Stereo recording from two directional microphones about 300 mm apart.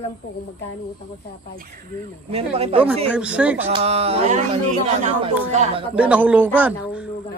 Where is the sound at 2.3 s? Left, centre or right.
Centre.